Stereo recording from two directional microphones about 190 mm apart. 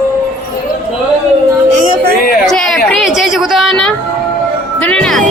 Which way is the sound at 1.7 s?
40° right (ahead or behind).